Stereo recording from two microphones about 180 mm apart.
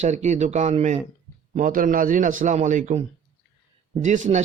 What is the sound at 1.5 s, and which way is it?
A man's voice, 50° right (ahead or behind).